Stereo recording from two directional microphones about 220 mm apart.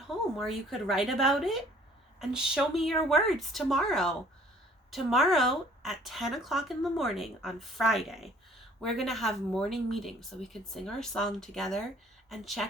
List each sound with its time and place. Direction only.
0.3 s speech: centre (ahead or behind)